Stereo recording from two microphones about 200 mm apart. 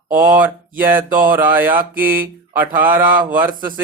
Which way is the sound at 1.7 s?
45° right (ahead or behind).